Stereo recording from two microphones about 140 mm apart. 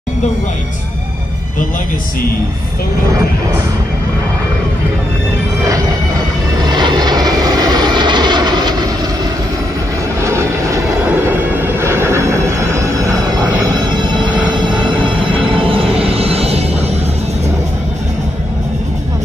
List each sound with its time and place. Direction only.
5.6 s music: 25° right (ahead or behind)
6.6 s vehicle: 30° right (ahead or behind)
10.2 s music: 20° right (ahead or behind)
14.6 s music: 35° right (ahead or behind)